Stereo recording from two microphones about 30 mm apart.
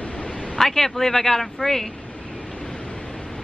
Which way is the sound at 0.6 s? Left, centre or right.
Centre.